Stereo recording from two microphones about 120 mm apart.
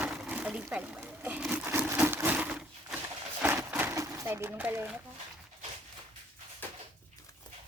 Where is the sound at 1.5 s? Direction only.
15° right (ahead or behind).